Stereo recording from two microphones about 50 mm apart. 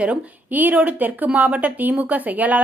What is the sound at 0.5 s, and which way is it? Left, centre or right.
Speech, right.